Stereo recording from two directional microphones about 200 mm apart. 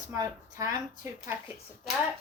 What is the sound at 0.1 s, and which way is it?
Speech, 15° right (ahead or behind).